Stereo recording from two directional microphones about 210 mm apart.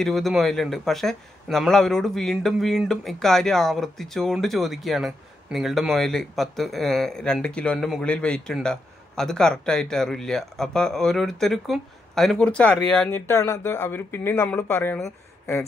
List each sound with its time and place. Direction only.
0.0 s a man's voice: centre (ahead or behind)